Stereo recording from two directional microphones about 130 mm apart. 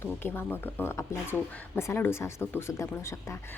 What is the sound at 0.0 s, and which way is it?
Speech, 15° left (ahead or behind).